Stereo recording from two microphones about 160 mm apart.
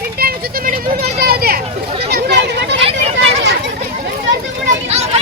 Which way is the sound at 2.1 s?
85° right.